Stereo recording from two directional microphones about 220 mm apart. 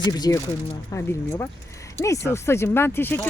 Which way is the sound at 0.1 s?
15° left (ahead or behind).